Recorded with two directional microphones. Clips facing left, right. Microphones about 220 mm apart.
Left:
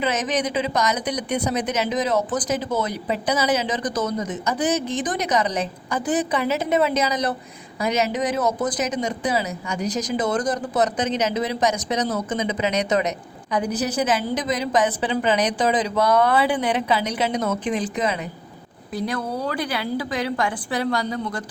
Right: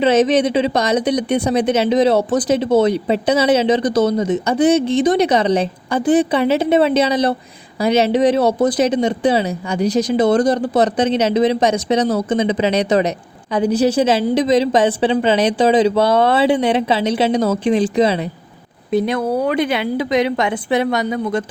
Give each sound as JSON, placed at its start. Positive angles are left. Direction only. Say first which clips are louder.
{"t": 0.0, "sound": "a woman's voice", "louder": "right 10 dB", "side_deg": -30}